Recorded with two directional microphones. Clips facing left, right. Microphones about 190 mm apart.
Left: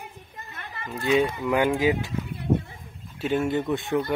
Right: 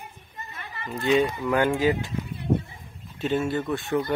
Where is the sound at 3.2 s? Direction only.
15° left (ahead or behind).